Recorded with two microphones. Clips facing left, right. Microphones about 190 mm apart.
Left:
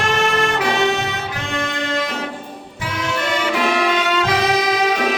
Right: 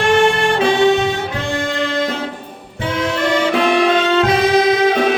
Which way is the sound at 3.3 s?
30° right (ahead or behind).